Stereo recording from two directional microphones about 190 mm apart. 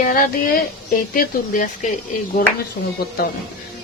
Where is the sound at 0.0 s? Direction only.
50° left (ahead or behind).